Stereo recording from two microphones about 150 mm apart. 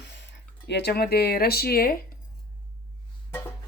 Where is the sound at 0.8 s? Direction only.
90° left.